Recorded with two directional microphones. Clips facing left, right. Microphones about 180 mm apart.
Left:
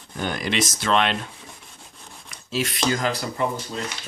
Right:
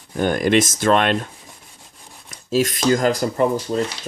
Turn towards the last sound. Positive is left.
turn(degrees=-50)  # may be behind; listen again after turning